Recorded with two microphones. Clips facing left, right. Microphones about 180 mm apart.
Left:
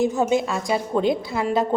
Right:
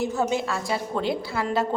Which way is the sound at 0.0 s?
15° left (ahead or behind).